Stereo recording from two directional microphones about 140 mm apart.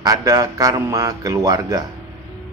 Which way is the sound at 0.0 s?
25° right (ahead or behind).